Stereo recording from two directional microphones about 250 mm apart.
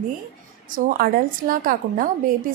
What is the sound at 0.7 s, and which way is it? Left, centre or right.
A woman's voice, right.